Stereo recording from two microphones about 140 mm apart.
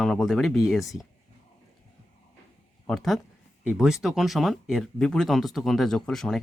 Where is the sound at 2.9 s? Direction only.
Centre (ahead or behind).